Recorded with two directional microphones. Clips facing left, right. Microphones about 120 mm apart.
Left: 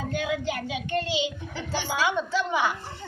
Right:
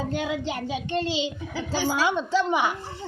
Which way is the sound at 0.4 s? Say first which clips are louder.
Right 1 dB; 30° right (ahead or behind).